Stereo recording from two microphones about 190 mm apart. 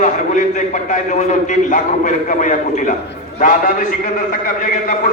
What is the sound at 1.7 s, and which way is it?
A man's voice, 40° left (ahead or behind).